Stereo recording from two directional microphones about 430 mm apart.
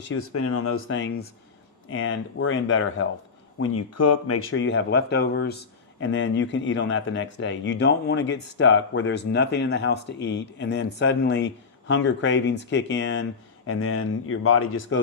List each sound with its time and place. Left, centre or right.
0.1 s speech: left